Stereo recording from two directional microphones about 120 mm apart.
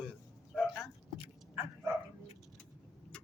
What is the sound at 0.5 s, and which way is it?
Dog, centre (ahead or behind).